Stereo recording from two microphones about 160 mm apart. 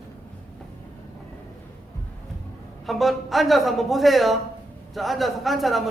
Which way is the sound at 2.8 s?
Centre (ahead or behind).